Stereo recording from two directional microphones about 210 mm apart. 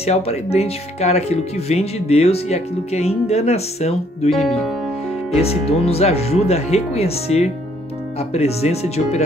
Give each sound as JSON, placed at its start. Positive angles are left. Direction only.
{"t": 0.0, "sound": "speech", "side_deg": 30}
{"t": 4.3, "sound": "speech", "side_deg": 0}
{"t": 5.3, "sound": "speech", "side_deg": 30}